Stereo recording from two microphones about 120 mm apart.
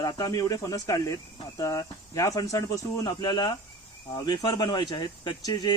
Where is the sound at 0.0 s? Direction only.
30° left (ahead or behind).